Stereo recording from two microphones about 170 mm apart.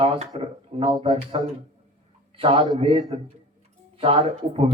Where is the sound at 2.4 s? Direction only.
30° right (ahead or behind).